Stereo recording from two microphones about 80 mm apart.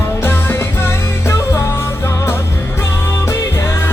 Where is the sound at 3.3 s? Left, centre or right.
Left.